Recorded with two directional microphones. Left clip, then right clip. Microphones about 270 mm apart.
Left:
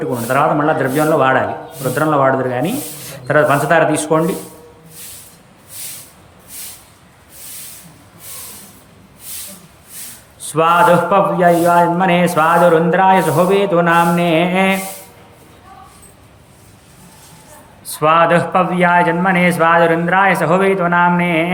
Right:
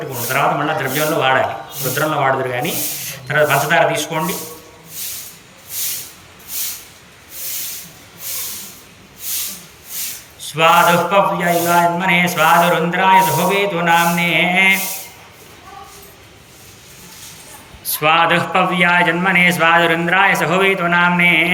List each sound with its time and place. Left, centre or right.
0.3 s a man's voice: centre
10.4 s a man's voice: left
17.8 s a man's voice: centre